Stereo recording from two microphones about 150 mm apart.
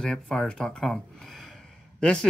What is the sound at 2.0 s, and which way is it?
Speech, 5° left (ahead or behind).